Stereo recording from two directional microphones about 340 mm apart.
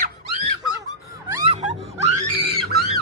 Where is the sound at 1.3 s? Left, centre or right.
Centre.